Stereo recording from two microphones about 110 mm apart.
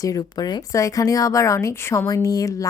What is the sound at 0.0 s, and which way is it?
Speech, 35° left (ahead or behind).